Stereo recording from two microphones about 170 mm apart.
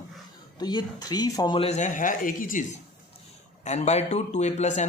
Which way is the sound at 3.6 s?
40° left (ahead or behind).